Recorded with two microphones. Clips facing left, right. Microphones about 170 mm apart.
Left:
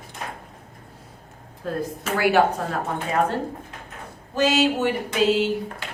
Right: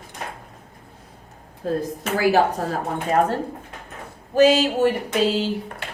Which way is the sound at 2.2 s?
35° right (ahead or behind).